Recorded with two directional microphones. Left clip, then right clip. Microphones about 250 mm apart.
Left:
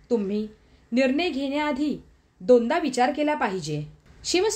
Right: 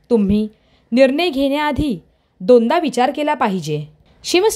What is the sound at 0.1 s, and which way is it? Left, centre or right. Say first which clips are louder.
A woman's voice: right 9 dB; right.